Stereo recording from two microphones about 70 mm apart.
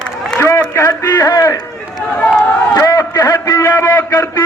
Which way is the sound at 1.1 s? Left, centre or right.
Left.